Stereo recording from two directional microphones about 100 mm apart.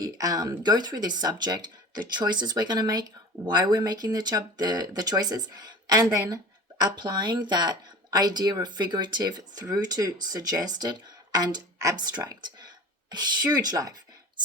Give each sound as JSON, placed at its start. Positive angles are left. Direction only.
{"t": 0.0, "sound": "speech", "side_deg": -35}